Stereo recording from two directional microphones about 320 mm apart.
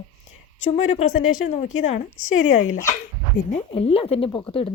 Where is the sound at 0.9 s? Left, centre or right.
Left.